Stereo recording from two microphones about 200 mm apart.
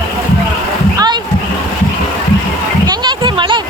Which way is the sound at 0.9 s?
20° right (ahead or behind).